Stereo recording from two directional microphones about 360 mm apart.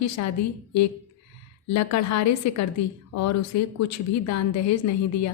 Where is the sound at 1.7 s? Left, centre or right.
Left.